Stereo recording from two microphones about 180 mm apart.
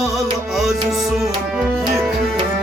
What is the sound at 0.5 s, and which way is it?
Tabla, centre (ahead or behind).